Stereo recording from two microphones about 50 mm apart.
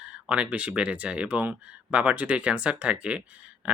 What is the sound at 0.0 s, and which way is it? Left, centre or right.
Speech, right.